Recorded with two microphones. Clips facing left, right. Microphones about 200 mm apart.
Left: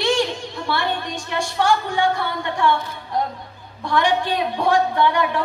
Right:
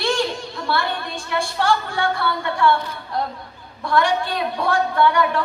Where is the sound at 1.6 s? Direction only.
15° left (ahead or behind).